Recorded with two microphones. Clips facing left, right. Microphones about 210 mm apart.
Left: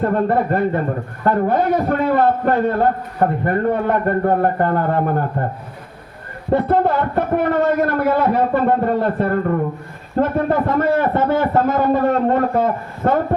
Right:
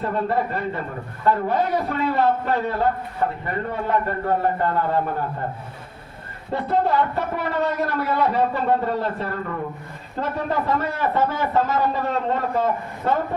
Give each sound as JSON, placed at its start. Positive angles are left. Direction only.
{"t": 0.0, "sound": "a man's voice", "side_deg": 50}
{"t": 6.5, "sound": "a man's voice", "side_deg": 55}